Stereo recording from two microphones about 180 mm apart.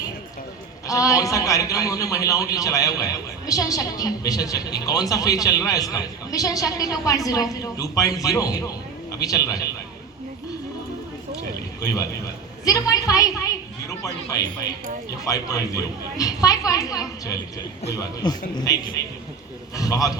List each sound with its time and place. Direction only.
0.9 s a man's voice: 20° left (ahead or behind)
11.8 s a man's voice: 15° left (ahead or behind)